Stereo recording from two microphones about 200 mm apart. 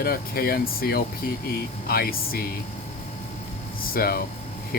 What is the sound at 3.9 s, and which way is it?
Speech, 50° left (ahead or behind).